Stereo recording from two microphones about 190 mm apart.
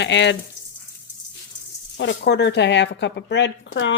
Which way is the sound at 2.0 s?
65° left (ahead or behind).